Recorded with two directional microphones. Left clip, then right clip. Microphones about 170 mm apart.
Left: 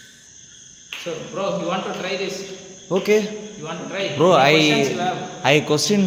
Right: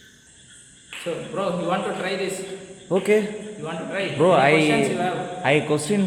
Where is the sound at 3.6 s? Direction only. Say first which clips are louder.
Even; centre (ahead or behind).